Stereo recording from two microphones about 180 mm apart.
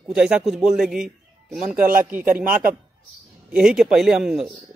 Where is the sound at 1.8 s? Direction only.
50° right (ahead or behind).